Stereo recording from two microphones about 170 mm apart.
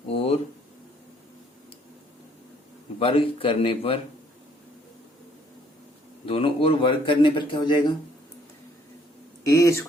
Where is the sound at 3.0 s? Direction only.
30° left (ahead or behind).